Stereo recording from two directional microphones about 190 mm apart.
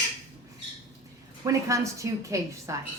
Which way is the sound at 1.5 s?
15° right (ahead or behind).